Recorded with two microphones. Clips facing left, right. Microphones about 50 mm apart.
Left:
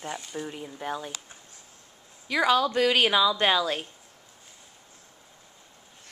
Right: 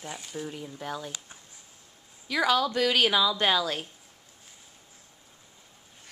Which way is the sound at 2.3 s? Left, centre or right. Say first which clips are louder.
Left 2 dB; centre.